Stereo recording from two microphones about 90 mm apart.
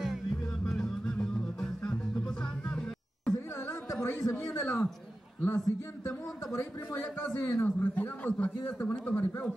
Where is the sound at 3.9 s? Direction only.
30° left (ahead or behind).